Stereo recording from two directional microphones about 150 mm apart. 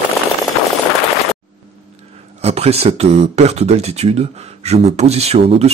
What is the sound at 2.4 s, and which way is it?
Speech, 45° right (ahead or behind).